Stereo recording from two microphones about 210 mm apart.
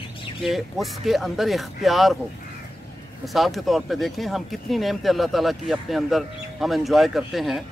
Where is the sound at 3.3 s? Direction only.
Centre (ahead or behind).